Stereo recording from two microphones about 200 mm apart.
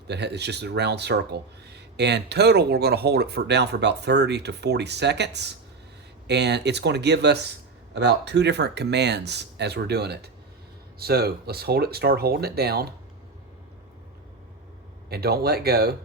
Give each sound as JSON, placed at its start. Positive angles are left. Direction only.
{"t": 0.1, "sound": "speech", "side_deg": -55}
{"t": 15.1, "sound": "speech", "side_deg": -50}